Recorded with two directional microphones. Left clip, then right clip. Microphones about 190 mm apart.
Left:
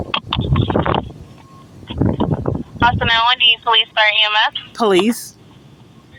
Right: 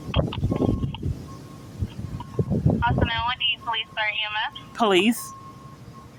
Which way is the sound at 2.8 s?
55° left (ahead or behind).